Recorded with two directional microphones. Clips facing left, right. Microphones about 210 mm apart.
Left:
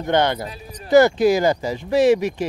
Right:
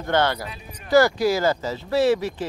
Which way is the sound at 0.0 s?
20° left (ahead or behind).